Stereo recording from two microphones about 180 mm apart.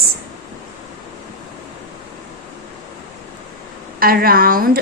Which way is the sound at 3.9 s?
55° right (ahead or behind).